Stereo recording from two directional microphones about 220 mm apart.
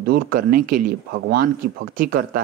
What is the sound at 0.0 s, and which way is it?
Speech, 40° right (ahead or behind).